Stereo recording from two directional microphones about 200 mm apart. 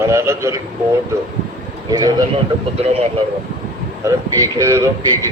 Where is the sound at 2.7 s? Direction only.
30° right (ahead or behind).